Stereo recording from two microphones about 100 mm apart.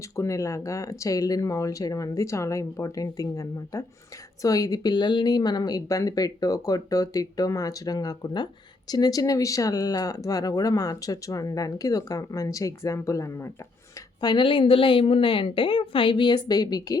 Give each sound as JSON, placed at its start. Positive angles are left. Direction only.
{"t": 0.2, "sound": "speech", "side_deg": 30}
{"t": 14.2, "sound": "a woman's voice", "side_deg": 50}
{"t": 16.5, "sound": "speech", "side_deg": 40}